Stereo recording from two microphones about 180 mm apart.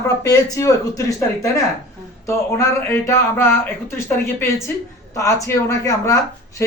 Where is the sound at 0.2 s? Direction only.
20° left (ahead or behind).